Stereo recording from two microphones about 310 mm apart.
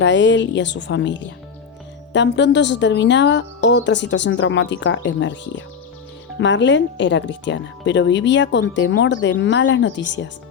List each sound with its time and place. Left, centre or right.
0.0 s a woman's voice: left